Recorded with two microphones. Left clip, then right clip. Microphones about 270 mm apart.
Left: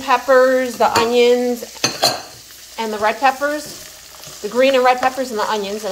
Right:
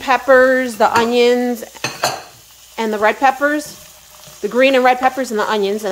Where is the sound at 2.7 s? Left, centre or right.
Right.